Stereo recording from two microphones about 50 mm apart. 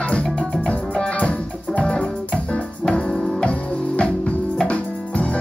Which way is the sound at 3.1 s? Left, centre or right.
Centre.